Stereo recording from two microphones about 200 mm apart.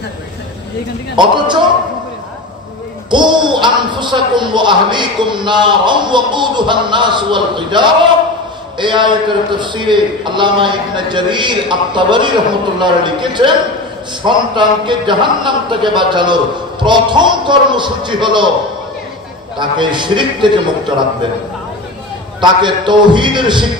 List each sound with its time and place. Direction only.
1.2 s speech: 20° right (ahead or behind)
3.1 s speech: 20° right (ahead or behind)
19.6 s speech: 25° right (ahead or behind)
22.4 s speech: 25° right (ahead or behind)